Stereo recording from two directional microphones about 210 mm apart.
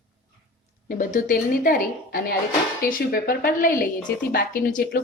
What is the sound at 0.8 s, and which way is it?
A woman's voice, 40° left (ahead or behind).